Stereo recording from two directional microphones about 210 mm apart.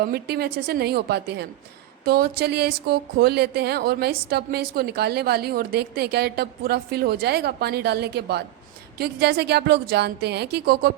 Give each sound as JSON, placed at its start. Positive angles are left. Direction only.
{"t": 0.0, "sound": "speech", "side_deg": -50}